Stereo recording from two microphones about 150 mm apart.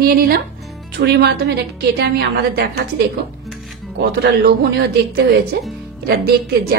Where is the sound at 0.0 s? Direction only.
90° right.